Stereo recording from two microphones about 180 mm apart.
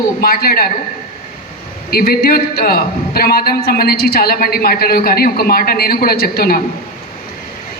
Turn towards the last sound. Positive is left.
turn(degrees=55)  # may be behind; listen again after turning